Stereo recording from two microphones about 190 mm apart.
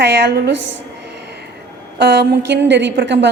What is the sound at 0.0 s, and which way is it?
Speech, 65° right (ahead or behind).